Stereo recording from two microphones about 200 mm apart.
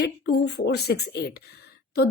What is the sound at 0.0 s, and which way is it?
A woman's voice, 55° left (ahead or behind).